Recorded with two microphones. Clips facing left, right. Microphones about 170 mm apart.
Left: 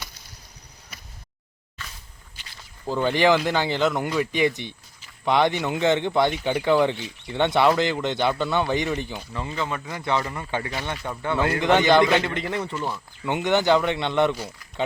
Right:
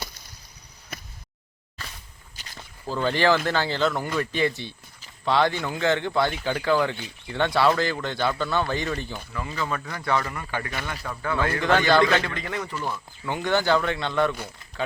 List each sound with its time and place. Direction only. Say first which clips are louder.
1.8 s a sound: right 1 dB; 35° right (ahead or behind)
2.3 s walk: right 2 dB; 40° right (ahead or behind)
2.8 s speech: left 2 dB; 15° left (ahead or behind)
9.3 s speech: even; 25° left (ahead or behind)